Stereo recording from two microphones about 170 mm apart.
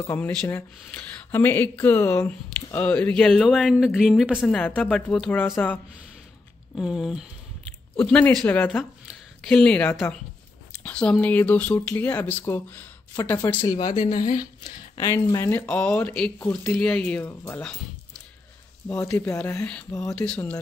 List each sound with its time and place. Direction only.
0.0 s speech: 15° left (ahead or behind)
6.8 s speech: centre (ahead or behind)
13.6 s speech: 25° left (ahead or behind)
18.9 s speech: 10° left (ahead or behind)